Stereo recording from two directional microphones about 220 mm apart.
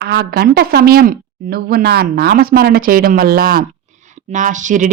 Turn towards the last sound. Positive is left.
turn(degrees=-35)  # may be behind; listen again after turning